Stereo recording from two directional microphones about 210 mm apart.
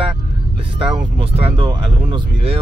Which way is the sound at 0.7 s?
25° right (ahead or behind).